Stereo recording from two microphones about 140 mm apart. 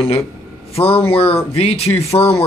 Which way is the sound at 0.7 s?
45° left (ahead or behind).